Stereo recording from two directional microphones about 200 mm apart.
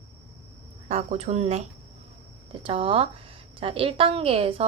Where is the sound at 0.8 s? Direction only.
35° right (ahead or behind).